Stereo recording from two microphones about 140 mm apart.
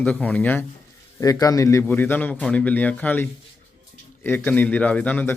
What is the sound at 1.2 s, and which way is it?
A man's voice, 25° left (ahead or behind).